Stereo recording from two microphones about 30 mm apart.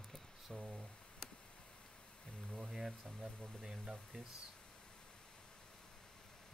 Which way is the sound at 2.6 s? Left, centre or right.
Centre.